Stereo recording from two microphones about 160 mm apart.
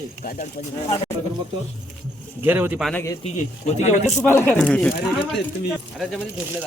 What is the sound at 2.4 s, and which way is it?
Speech, 15° right (ahead or behind).